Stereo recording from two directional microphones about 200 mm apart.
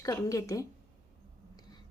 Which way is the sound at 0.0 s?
15° left (ahead or behind).